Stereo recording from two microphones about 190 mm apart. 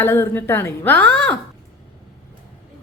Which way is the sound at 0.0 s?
10° left (ahead or behind).